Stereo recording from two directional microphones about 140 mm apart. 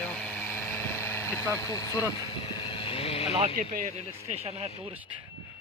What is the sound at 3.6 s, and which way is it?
Speech, 80° right.